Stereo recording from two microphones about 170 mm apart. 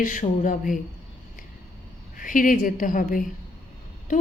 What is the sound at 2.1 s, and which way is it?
A woman's voice, 55° left (ahead or behind).